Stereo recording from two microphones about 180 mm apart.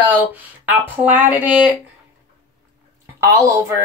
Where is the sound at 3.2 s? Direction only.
15° right (ahead or behind).